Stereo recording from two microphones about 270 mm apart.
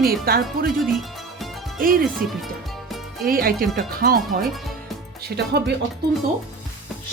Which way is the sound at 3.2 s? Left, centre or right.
Right.